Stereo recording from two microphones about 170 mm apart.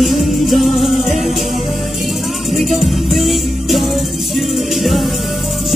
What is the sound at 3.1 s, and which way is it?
Music, centre (ahead or behind).